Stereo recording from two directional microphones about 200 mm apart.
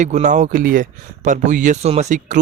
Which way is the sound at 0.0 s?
35° right (ahead or behind).